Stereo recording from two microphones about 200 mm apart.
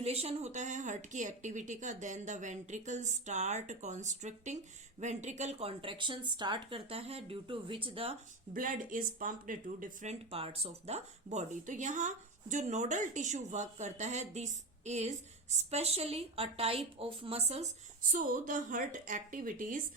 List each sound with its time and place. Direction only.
0.0 s speech: 30° right (ahead or behind)
8.5 s speech: 40° right (ahead or behind)